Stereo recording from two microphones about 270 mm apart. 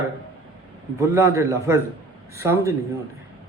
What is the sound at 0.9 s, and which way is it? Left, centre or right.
Speech, centre.